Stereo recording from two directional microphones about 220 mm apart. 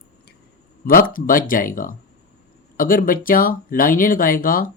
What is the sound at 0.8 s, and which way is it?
Speech, 40° left (ahead or behind).